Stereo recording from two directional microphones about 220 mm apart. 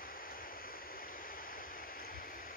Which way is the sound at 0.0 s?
40° left (ahead or behind).